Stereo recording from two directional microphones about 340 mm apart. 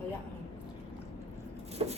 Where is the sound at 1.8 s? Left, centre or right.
Centre.